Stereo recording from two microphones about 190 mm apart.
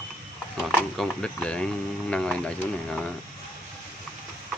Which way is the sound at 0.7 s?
5° left (ahead or behind).